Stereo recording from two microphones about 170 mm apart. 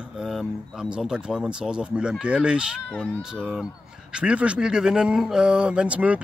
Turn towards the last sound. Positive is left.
turn(degrees=-5)  # may be behind; listen again after turning